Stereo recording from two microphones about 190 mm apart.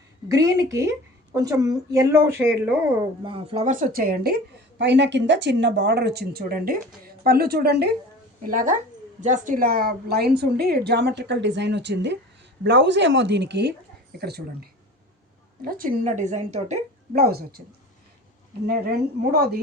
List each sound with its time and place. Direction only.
0.3 s speech: 15° right (ahead or behind)
3.2 s speech: 30° right (ahead or behind); by 4.4 s 55° right (ahead or behind)
4.8 s speech: 65° right (ahead or behind)
8.4 s speech: 45° right (ahead or behind)
17.2 s speech: 55° right (ahead or behind)
18.6 s speech: 55° right (ahead or behind)